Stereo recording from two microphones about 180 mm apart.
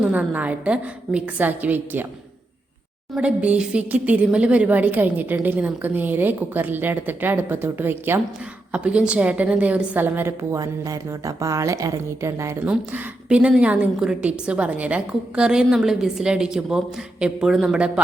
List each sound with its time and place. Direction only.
0.0 s a woman's voice: 5° right (ahead or behind)
3.2 s a woman's voice: 5° right (ahead or behind)
12.7 s a woman's voice: 5° right (ahead or behind)